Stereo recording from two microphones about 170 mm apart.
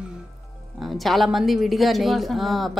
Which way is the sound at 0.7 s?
Centre (ahead or behind).